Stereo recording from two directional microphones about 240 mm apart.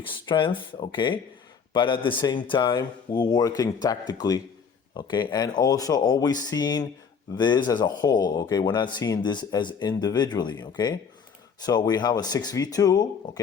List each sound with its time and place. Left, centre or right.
0.0 s speech: centre